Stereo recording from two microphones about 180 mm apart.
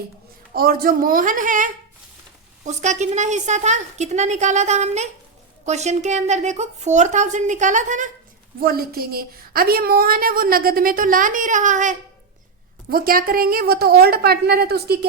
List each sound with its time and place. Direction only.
0.5 s a woman's voice: 55° right (ahead or behind)
8.6 s a woman's voice: 55° right (ahead or behind)